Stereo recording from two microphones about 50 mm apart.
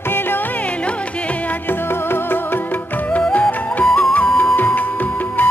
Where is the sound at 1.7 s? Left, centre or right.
Left.